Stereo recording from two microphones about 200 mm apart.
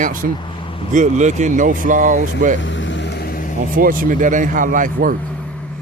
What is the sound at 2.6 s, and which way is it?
Vehicle, 65° left (ahead or behind).